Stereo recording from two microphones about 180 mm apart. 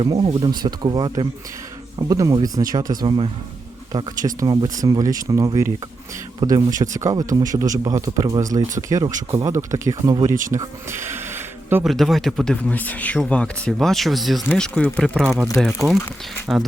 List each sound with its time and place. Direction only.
0.0 s speech: 30° right (ahead or behind); by 11.9 s 10° right (ahead or behind)
11.9 s speech: centre (ahead or behind)
16.5 s speech: 10° right (ahead or behind)